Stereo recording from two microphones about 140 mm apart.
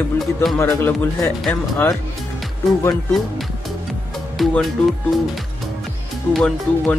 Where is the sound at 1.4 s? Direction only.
10° left (ahead or behind).